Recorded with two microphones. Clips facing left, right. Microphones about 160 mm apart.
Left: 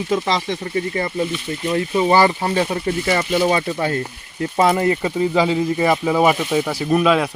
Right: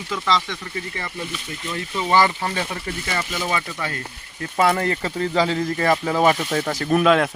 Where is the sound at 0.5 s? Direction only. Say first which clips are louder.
Left 9 dB; 35° left (ahead or behind).